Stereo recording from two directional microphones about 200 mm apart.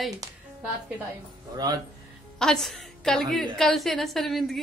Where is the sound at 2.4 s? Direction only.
Centre (ahead or behind).